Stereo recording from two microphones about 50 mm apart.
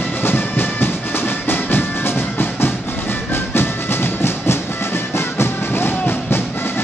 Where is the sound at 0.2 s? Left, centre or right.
Left.